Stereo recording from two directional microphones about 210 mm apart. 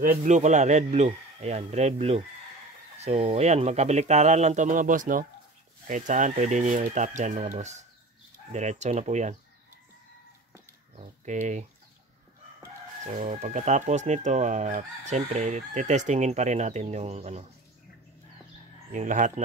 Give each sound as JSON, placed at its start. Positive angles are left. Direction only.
{"t": 0.0, "sound": "speech", "side_deg": -40}
{"t": 11.0, "sound": "speech", "side_deg": -35}
{"t": 13.0, "sound": "speech", "side_deg": -35}
{"t": 18.9, "sound": "speech", "side_deg": -35}